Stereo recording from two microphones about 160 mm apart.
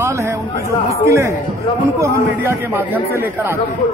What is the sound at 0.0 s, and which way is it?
A man's voice, 15° right (ahead or behind).